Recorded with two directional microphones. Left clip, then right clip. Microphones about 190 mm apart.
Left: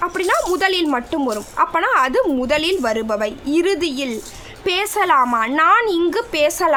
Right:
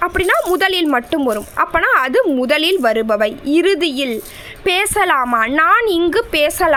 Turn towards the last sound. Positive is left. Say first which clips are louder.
# right 2 dB
turn(degrees=-20)  # may be behind; listen again after turning